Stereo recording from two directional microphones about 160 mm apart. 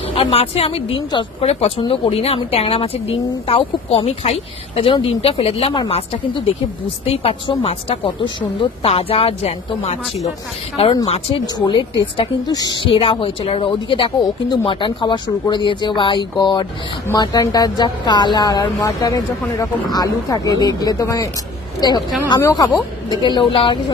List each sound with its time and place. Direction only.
0.1 s speech: 40° left (ahead or behind)
11.4 s speech: 25° left (ahead or behind)
22.4 s speech: 15° left (ahead or behind); by 23.8 s 35° left (ahead or behind)